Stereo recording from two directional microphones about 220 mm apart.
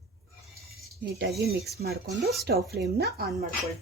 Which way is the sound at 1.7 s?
45° right (ahead or behind).